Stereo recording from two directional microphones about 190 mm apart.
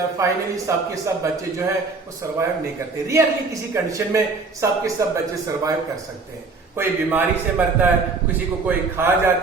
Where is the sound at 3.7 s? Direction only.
15° right (ahead or behind).